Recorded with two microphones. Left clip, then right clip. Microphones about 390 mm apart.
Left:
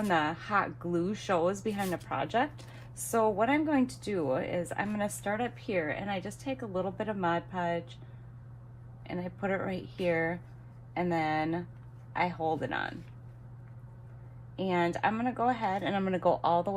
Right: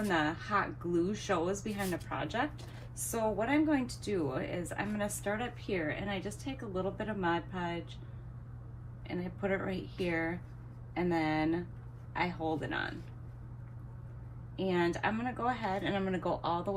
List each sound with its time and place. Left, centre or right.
0.1 s a woman's voice: centre
9.0 s a woman's voice: centre
14.5 s a woman's voice: centre